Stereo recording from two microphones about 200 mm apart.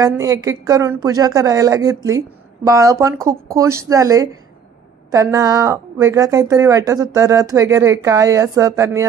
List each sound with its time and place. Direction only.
0.0 s speech: 15° right (ahead or behind)